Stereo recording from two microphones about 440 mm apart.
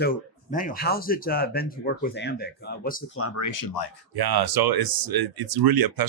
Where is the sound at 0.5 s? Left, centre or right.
Centre.